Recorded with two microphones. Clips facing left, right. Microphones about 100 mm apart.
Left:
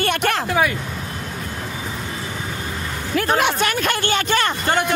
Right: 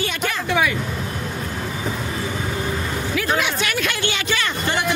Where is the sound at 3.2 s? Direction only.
50° left (ahead or behind).